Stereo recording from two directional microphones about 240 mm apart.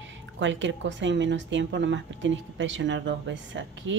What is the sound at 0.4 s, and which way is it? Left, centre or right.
Speech, right.